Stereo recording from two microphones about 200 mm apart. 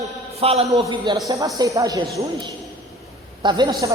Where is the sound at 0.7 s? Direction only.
20° right (ahead or behind).